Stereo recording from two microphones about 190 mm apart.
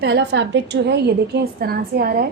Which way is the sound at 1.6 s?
55° right (ahead or behind).